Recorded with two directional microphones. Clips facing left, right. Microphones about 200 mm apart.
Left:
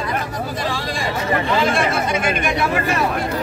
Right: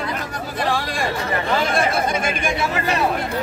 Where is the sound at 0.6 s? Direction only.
60° right (ahead or behind).